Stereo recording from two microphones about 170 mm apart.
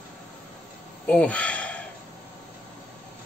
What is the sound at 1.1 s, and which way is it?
Speech, 5° left (ahead or behind).